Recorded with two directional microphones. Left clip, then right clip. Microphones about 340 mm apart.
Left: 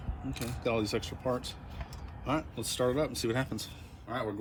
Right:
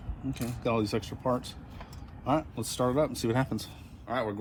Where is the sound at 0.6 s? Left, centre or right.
Centre.